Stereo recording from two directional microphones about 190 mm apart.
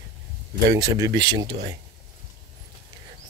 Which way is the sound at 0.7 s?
20° right (ahead or behind).